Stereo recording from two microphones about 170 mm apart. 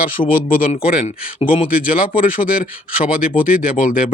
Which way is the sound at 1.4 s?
35° left (ahead or behind).